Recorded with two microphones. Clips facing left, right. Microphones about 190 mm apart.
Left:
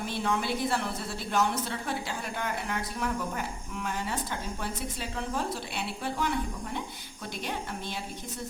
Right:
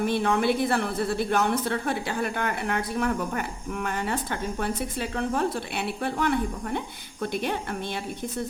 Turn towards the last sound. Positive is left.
turn(degrees=-60)  # may be behind; listen again after turning